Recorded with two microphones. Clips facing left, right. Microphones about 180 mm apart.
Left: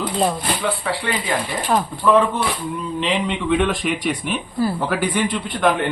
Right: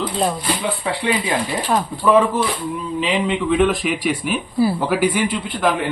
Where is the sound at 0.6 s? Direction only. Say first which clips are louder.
Even; 15° right (ahead or behind).